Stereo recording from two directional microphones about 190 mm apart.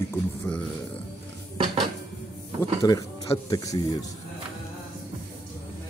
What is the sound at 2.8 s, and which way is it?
Speech, 20° left (ahead or behind).